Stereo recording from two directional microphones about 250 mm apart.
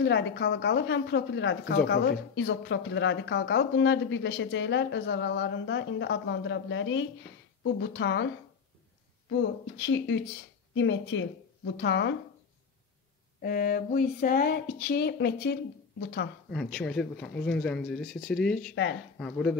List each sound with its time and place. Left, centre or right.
0.0 s a woman's voice: left
9.4 s a woman's voice: left
13.4 s speech: left
16.4 s speech: centre